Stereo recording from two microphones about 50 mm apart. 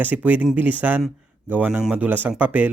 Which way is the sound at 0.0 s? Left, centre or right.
Right.